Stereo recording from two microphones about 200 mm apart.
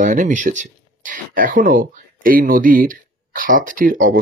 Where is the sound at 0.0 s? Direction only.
40° right (ahead or behind).